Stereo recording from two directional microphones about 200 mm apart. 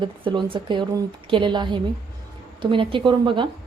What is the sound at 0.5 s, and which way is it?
A woman's voice, 25° right (ahead or behind).